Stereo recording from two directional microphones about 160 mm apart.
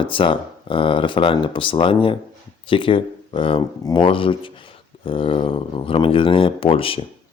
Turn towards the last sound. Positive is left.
turn(degrees=35)  # may be behind; listen again after turning